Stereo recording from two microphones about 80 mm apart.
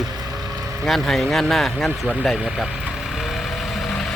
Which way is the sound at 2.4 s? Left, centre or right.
Centre.